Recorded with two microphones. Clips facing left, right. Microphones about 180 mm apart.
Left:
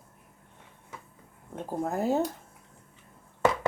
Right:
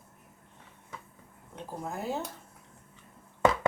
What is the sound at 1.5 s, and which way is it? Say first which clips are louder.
Speech: left 7 dB; 50° left (ahead or behind).